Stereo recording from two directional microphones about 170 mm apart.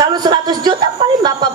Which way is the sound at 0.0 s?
25° right (ahead or behind).